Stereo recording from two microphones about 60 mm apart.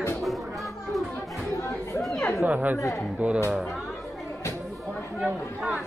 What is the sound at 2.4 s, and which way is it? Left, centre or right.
Speech, right.